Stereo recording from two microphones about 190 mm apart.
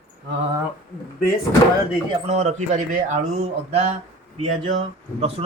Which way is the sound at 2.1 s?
35° right (ahead or behind).